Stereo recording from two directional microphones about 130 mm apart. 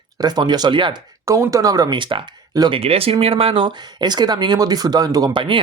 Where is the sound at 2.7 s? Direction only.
50° right (ahead or behind).